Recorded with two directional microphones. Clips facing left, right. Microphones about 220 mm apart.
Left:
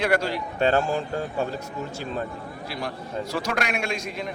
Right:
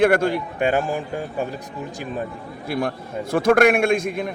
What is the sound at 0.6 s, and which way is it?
Speech, 15° right (ahead or behind).